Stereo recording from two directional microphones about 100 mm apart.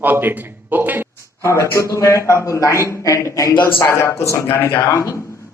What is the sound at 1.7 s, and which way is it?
A man's voice, 30° left (ahead or behind).